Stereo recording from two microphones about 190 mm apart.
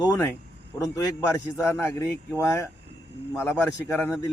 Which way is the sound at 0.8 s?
15° left (ahead or behind).